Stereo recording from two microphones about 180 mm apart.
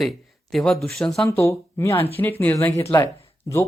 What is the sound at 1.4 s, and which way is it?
Speech, 15° left (ahead or behind).